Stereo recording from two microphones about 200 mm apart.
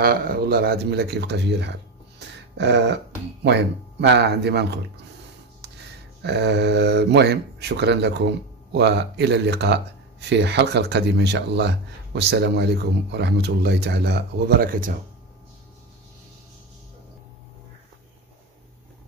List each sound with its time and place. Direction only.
0.0 s speech: 50° right (ahead or behind)
5.6 s music: 55° right (ahead or behind)
6.2 s speech: 55° right (ahead or behind)